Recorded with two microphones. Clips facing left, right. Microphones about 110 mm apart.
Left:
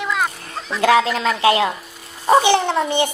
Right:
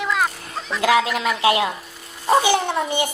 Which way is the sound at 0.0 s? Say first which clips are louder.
Even; centre (ahead or behind).